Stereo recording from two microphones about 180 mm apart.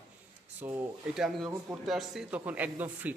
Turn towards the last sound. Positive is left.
turn(degrees=-10)  # may be behind; listen again after turning